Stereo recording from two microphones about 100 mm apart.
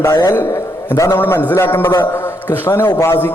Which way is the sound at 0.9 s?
30° left (ahead or behind).